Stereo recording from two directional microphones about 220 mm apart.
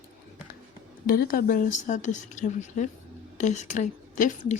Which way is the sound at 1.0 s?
40° left (ahead or behind).